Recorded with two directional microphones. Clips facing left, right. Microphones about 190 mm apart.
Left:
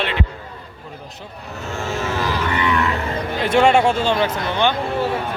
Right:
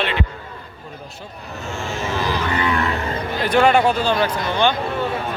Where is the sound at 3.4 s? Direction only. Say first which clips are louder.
Left 1 dB; 25° left (ahead or behind).